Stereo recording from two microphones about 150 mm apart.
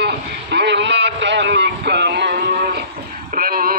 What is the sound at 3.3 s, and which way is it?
Radio, 75° right (ahead or behind).